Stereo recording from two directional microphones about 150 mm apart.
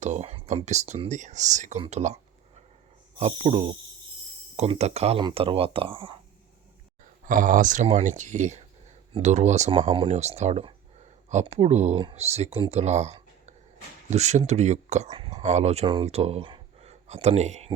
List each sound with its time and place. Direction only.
0.0 s speech: 50° right (ahead or behind)
3.2 s speech: 50° right (ahead or behind)
7.3 s speech: 60° right (ahead or behind)
9.9 s speech: 40° right (ahead or behind)
11.9 s speech: 40° right (ahead or behind)
15.1 s speech: 35° right (ahead or behind)